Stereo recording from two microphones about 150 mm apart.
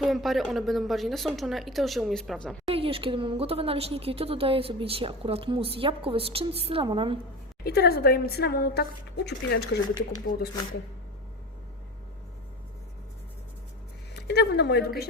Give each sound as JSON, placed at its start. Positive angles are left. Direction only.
{"t": 0.0, "sound": "a woman's voice", "side_deg": 0}
{"t": 2.6, "sound": "a woman's voice", "side_deg": -40}
{"t": 7.6, "sound": "a woman's voice", "side_deg": 90}
{"t": 14.1, "sound": "speech", "side_deg": 90}